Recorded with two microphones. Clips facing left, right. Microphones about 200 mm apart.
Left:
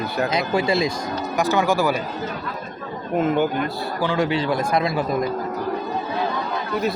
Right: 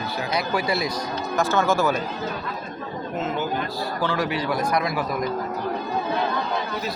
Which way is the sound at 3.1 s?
55° left (ahead or behind).